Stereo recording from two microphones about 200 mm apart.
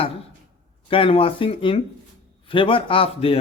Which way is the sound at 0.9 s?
25° left (ahead or behind).